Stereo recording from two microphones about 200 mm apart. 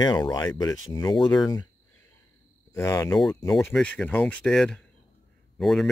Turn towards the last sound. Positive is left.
turn(degrees=0)  # may be behind; listen again after turning